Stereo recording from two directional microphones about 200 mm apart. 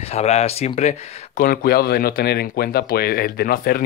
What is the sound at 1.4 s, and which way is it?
Speech, 45° left (ahead or behind).